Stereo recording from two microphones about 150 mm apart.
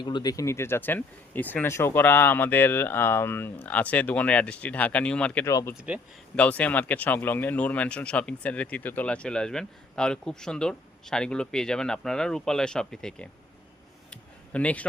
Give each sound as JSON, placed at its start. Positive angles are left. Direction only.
{"t": 0.0, "sound": "speech", "side_deg": 30}
{"t": 5.5, "sound": "speech", "side_deg": 20}
{"t": 5.7, "sound": "speech", "side_deg": -10}
{"t": 6.3, "sound": "speech", "side_deg": 10}
{"t": 14.1, "sound": "a sound", "side_deg": 10}